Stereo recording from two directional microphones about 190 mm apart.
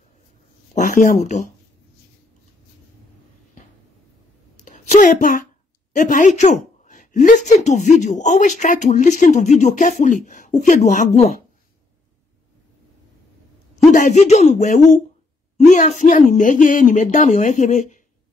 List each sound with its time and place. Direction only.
0.7 s a woman's voice: 40° left (ahead or behind)
4.6 s a sound: 40° left (ahead or behind)
5.9 s a woman's voice: 40° left (ahead or behind)
13.9 s a woman's voice: 40° left (ahead or behind)